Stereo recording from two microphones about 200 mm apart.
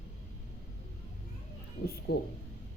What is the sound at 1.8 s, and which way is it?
Speech, 50° left (ahead or behind).